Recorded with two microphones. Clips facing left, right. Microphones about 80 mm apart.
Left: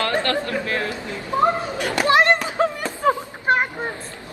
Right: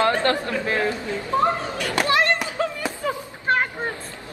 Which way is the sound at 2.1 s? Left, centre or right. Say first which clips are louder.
Left 5 dB; left.